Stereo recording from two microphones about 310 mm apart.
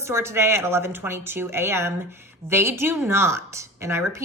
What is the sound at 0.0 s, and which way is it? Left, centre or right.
A woman's voice, centre.